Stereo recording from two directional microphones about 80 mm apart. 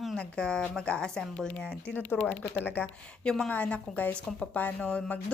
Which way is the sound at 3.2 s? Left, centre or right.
Centre.